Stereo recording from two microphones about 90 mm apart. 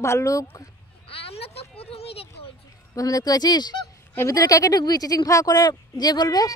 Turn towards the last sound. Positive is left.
turn(degrees=45)  # may be behind; listen again after turning